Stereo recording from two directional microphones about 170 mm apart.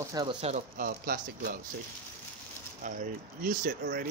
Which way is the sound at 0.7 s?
55° right (ahead or behind).